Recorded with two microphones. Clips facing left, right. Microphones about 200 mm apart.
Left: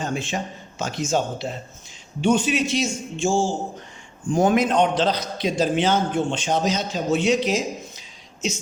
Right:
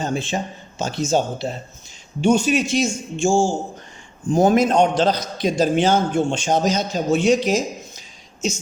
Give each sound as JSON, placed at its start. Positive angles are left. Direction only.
{"t": 0.0, "sound": "a man's voice", "side_deg": -35}